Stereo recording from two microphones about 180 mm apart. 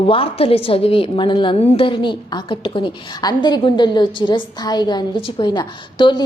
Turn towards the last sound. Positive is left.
turn(degrees=25)  # may be behind; listen again after turning